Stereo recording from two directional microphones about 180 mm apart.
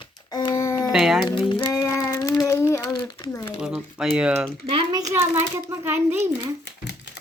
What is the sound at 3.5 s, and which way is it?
Speech, 5° right (ahead or behind).